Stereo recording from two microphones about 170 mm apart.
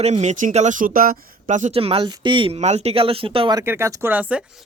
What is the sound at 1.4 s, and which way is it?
Speech, 40° right (ahead or behind).